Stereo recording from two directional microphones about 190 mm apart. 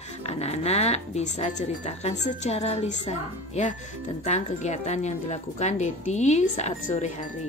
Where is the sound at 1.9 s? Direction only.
35° left (ahead or behind).